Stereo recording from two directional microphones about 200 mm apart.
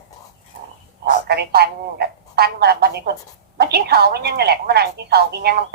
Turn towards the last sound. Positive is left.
turn(degrees=-55)  # may be behind; listen again after turning